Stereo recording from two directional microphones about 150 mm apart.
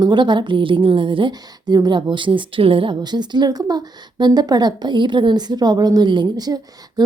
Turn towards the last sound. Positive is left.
turn(degrees=-25)  # may be behind; listen again after turning